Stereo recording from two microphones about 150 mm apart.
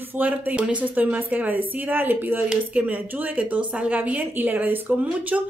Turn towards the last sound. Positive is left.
turn(degrees=-10)  # may be behind; listen again after turning